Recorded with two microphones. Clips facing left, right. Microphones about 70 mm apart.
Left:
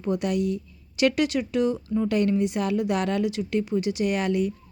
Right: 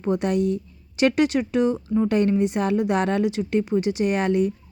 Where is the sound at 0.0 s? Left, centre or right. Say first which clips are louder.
Right 3 dB; right.